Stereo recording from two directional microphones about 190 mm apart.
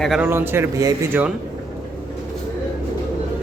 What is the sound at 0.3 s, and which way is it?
Speech, 15° right (ahead or behind).